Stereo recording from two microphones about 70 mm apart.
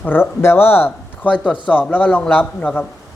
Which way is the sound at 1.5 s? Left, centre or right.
Left.